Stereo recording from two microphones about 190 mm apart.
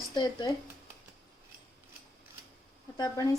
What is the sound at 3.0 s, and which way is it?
Speech, 20° left (ahead or behind).